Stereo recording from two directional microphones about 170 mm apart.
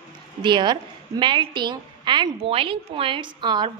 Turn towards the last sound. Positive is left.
turn(degrees=-25)  # may be behind; listen again after turning